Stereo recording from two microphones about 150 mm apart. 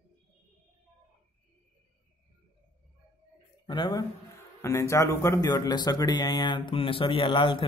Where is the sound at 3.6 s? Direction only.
30° left (ahead or behind).